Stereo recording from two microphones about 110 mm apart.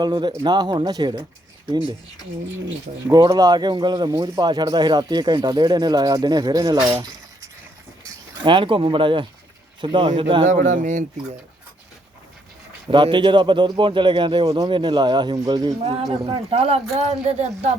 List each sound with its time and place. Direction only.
0.0 s speech: 40° right (ahead or behind)
3.1 s speech: 40° right (ahead or behind)
8.4 s a man's voice: 50° right (ahead or behind)
10.5 s speech: 90° right
12.9 s a man's voice: 45° right (ahead or behind)
15.8 s speech: 70° right (ahead or behind)
16.1 s speech: 50° right (ahead or behind)
16.9 s speech: 75° right (ahead or behind)